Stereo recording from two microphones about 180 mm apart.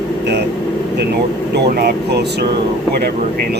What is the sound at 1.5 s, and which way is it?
Speech, 65° right (ahead or behind).